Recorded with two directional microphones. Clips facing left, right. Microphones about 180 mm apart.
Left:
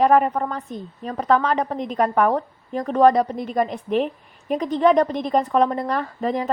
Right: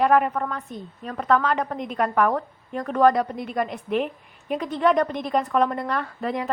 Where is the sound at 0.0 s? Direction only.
35° left (ahead or behind).